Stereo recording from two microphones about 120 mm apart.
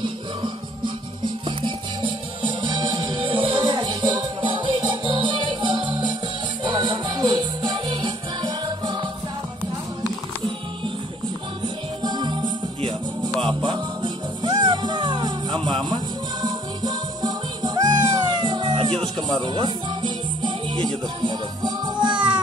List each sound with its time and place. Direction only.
0.0 s music: 40° right (ahead or behind)
11.6 s music: 40° right (ahead or behind)